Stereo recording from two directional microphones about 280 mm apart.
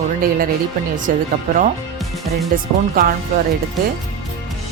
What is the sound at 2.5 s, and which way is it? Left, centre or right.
Speech, right.